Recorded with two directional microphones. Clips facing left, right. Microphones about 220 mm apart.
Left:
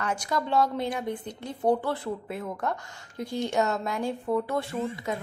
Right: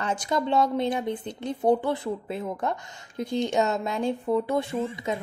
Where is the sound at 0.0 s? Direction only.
20° right (ahead or behind).